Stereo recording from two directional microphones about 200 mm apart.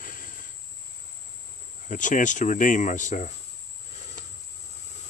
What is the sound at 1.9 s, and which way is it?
Speech, 40° left (ahead or behind).